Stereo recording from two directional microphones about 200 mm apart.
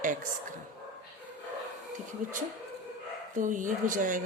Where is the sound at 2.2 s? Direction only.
40° right (ahead or behind).